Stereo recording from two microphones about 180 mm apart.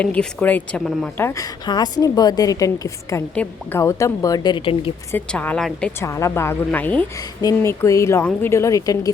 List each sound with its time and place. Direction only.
0.0 s a woman's voice: 5° left (ahead or behind); by 4.9 s 30° left (ahead or behind)
5.1 s a woman's voice: 10° left (ahead or behind)
6.0 s a woman's voice: 15° left (ahead or behind)